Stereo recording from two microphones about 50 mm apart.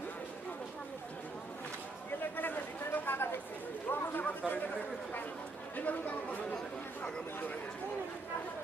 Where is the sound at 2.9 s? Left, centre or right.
Left.